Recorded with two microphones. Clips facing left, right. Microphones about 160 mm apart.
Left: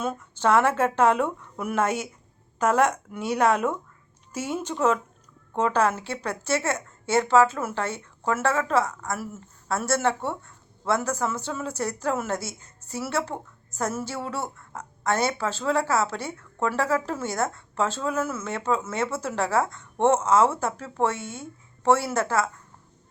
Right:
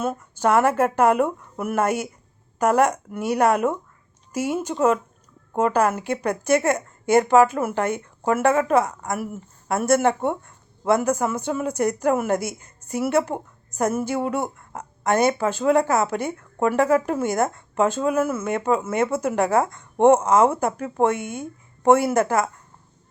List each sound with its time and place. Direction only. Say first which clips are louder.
0.0 s a woman's voice: right 3 dB; 10° right (ahead or behind)